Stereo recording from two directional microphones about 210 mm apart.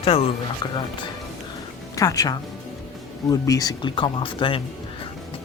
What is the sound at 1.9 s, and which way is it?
Speech, 15° left (ahead or behind).